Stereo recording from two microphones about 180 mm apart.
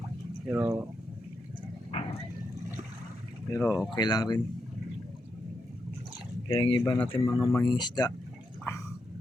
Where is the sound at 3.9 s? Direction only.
20° left (ahead or behind).